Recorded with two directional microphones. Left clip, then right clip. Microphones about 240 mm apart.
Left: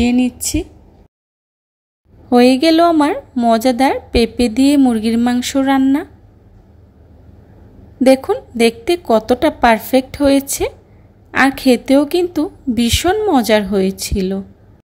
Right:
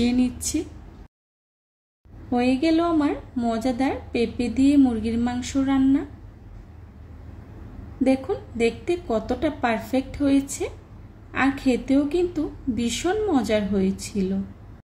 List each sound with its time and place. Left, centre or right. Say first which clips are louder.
0.0 s speech: left 8 dB; left
2.3 s a woman's voice: left 11 dB; left
8.0 s a woman's voice: left 11 dB; left